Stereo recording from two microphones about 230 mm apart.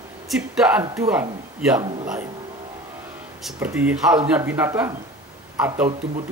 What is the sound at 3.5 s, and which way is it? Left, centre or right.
Speech, centre.